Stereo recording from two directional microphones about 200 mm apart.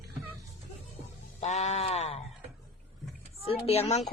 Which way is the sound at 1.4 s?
35° left (ahead or behind).